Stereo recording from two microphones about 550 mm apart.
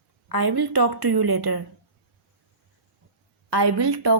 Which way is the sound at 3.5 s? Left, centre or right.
Right.